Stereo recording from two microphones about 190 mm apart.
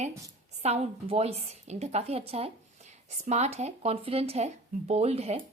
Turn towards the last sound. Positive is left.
turn(degrees=-35)  # may be behind; listen again after turning